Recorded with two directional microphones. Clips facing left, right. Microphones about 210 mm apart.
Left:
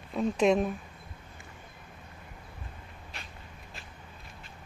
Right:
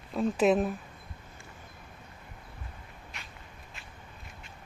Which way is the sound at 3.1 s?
30° left (ahead or behind).